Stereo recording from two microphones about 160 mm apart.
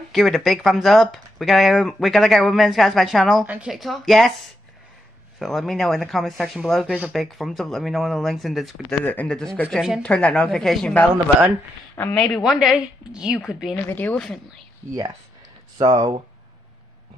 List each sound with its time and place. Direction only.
0.1 s a woman's voice: centre (ahead or behind)
12.2 s speech: centre (ahead or behind)
13.8 s a woman's voice: 10° left (ahead or behind)
15.8 s speech: 25° right (ahead or behind)